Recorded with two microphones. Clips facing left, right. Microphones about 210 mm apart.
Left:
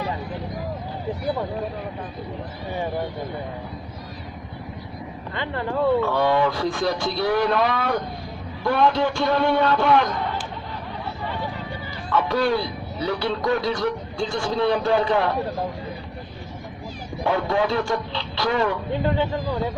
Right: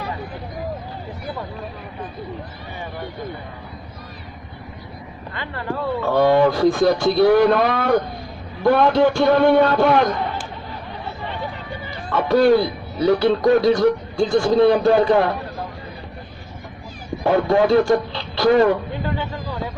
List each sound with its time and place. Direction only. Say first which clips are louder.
5.3 s speech: left 3 dB; 20° left (ahead or behind)
6.1 s a man's voice: right 5 dB; 45° right (ahead or behind)
12.0 s a man's voice: right 6 dB; 45° right (ahead or behind)
17.2 s speech: right 6 dB; 45° right (ahead or behind)
19.0 s speech: left 5 dB; 20° left (ahead or behind)